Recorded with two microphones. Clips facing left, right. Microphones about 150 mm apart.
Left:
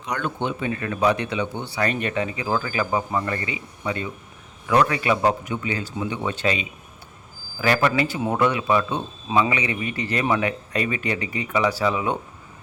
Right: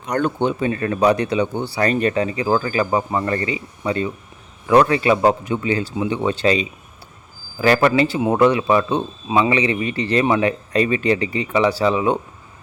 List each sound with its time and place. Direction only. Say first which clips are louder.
0.1 s speech: right 7 dB; 40° right (ahead or behind)